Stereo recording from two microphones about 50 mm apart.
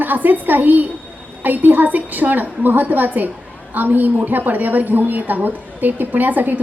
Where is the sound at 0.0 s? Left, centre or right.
Right.